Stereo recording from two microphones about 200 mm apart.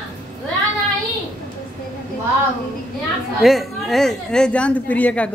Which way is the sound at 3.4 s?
Centre (ahead or behind).